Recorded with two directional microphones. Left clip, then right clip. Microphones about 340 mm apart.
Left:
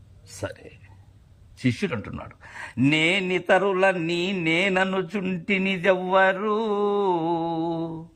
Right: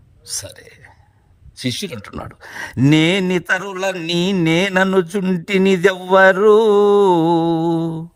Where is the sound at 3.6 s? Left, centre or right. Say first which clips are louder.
Left 1 dB; centre.